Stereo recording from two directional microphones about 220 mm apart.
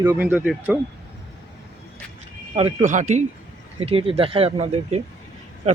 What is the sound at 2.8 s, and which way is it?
Speech, 35° right (ahead or behind).